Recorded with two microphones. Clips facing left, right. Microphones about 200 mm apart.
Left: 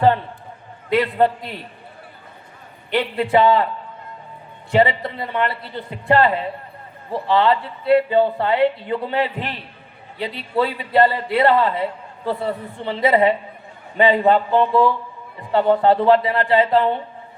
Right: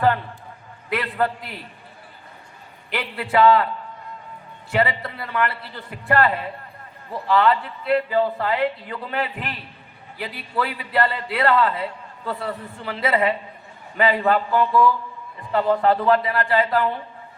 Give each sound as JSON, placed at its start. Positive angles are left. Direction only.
{"t": 0.9, "sound": "a man's voice", "side_deg": 25}
{"t": 2.9, "sound": "a man's voice", "side_deg": 25}
{"t": 4.7, "sound": "a man's voice", "side_deg": 25}